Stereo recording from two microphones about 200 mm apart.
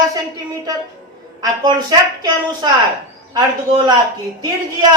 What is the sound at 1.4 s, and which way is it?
A man's voice, 20° right (ahead or behind).